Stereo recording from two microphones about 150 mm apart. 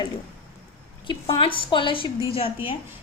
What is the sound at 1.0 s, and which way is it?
A woman's voice, 35° left (ahead or behind).